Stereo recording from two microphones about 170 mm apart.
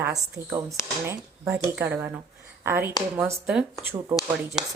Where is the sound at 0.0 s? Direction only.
15° right (ahead or behind).